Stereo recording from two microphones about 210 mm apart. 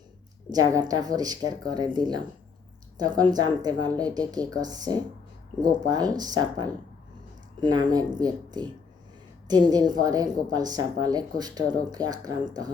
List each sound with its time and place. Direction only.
0.5 s a woman's voice: 15° right (ahead or behind)